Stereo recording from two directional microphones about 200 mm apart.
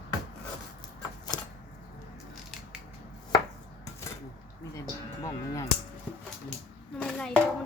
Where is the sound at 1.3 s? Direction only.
20° left (ahead or behind).